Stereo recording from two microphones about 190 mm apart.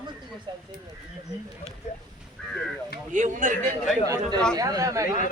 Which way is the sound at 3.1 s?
40° right (ahead or behind).